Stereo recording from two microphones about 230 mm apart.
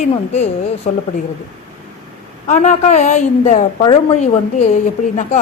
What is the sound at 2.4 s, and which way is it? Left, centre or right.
A woman's voice, left.